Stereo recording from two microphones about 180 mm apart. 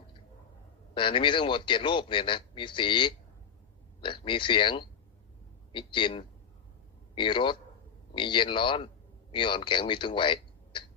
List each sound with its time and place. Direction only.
0.9 s a man's voice: 30° left (ahead or behind)